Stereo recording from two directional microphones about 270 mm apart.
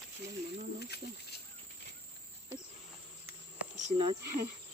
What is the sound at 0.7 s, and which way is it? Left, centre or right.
Speech, left.